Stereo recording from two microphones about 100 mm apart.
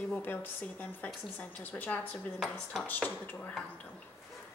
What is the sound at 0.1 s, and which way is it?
A woman's voice, 20° left (ahead or behind).